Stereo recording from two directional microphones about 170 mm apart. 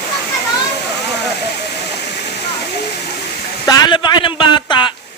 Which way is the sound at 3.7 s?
25° left (ahead or behind).